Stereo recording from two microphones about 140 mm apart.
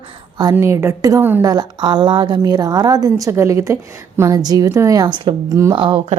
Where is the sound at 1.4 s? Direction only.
30° right (ahead or behind).